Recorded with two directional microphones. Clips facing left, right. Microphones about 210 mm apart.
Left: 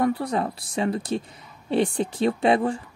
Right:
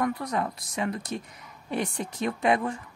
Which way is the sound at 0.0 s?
30° left (ahead or behind).